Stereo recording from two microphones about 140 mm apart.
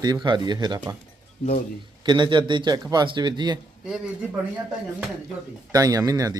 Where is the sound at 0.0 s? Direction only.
30° right (ahead or behind).